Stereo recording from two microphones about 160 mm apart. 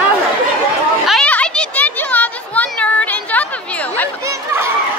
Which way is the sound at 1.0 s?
5° left (ahead or behind).